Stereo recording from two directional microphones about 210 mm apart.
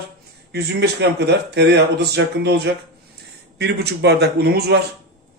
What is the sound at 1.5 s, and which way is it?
A man's voice, 55° right (ahead or behind).